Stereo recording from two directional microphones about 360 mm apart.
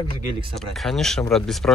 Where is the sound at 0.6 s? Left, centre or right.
Centre.